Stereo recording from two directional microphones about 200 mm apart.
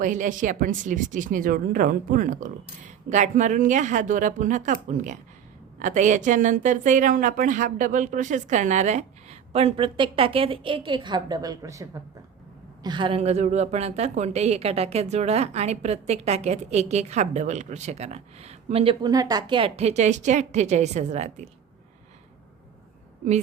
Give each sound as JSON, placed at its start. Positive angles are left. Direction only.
{"t": 0.0, "sound": "a woman's voice", "side_deg": -40}